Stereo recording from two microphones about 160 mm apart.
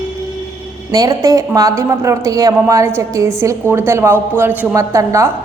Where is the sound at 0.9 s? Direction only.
25° right (ahead or behind).